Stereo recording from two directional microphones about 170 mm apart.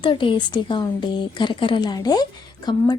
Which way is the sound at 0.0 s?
30° left (ahead or behind).